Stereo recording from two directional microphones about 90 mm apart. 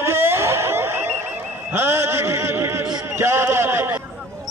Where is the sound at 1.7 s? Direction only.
25° right (ahead or behind).